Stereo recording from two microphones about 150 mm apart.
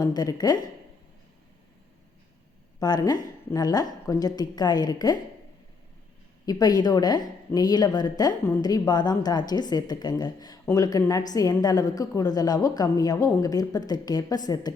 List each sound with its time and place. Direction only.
0.0 s a woman's voice: 25° left (ahead or behind)
2.7 s a woman's voice: 25° left (ahead or behind)
6.4 s a woman's voice: 25° left (ahead or behind)